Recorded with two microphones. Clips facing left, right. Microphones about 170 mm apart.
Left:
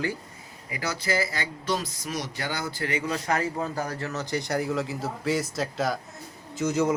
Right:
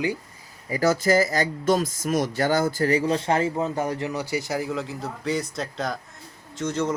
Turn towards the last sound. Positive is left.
turn(degrees=10)  # may be behind; listen again after turning